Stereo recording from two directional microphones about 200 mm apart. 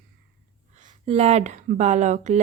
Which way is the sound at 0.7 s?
35° right (ahead or behind).